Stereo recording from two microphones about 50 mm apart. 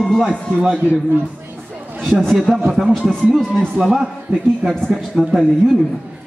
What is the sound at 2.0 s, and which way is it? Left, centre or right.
Speech, centre.